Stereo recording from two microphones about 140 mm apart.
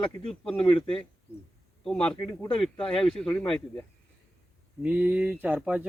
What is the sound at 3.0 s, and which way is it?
Speech, 5° left (ahead or behind).